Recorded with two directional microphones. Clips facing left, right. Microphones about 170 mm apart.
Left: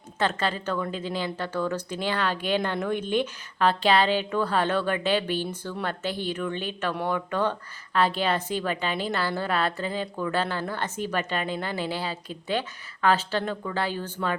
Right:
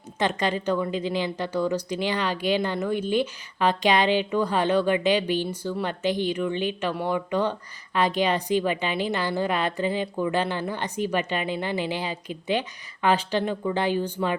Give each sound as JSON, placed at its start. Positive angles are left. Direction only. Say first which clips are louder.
{"t": 0.2, "sound": "a woman's voice", "louder": "right 2 dB", "side_deg": -15}